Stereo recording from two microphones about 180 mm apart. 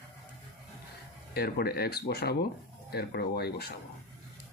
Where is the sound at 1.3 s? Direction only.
60° left (ahead or behind).